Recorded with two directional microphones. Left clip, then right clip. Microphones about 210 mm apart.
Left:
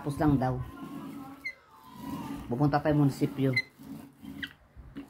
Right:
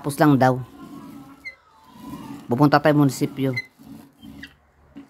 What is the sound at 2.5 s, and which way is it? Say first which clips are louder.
Speech: right 11 dB; 50° right (ahead or behind).